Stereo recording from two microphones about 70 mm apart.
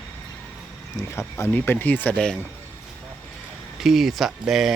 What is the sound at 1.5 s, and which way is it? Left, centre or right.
Speech, left.